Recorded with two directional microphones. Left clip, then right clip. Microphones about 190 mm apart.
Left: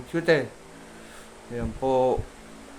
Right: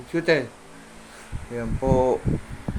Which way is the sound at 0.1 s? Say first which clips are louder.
Right 1 dB; centre (ahead or behind).